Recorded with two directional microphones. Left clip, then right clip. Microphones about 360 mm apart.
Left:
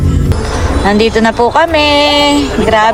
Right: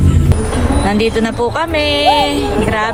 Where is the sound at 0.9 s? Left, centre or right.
Centre.